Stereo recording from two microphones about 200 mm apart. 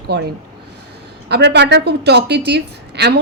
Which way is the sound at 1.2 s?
55° right (ahead or behind).